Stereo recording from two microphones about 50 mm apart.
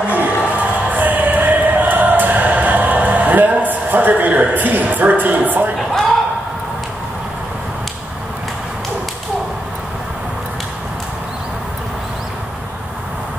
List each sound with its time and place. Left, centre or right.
0.1 s music: right